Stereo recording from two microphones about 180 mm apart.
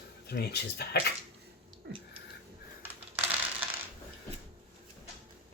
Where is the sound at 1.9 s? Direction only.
70° right (ahead or behind).